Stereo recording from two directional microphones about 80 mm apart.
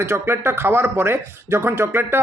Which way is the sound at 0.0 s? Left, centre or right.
Right.